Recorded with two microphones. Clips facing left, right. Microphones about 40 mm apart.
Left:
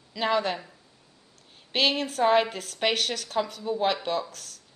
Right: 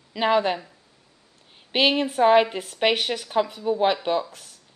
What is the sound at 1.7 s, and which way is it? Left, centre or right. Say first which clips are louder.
A woman's voice: right 4 dB; centre.